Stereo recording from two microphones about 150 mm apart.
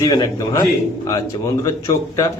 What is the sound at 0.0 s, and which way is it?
A man's voice, 25° left (ahead or behind).